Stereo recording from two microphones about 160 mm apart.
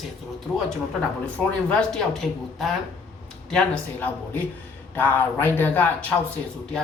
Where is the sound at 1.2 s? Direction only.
5° left (ahead or behind).